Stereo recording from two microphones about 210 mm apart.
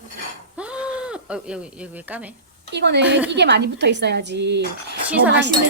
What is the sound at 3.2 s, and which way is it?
A woman's voice, 55° right (ahead or behind).